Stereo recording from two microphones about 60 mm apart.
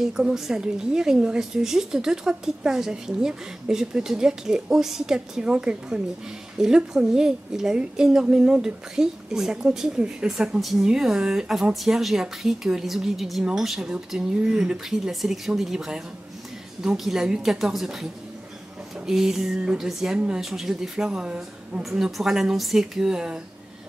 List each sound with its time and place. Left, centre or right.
0.0 s a woman's voice: centre
19.0 s a woman's voice: centre
20.2 s a woman's voice: centre
20.4 s a woman's voice: centre